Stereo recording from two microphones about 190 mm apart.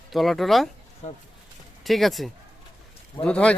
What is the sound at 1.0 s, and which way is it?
Speech, 35° left (ahead or behind).